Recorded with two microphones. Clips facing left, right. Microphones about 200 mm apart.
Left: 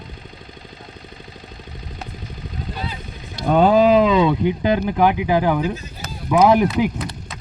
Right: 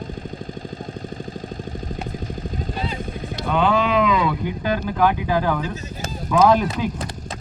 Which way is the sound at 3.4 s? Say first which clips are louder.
Left 6 dB; 40° left (ahead or behind).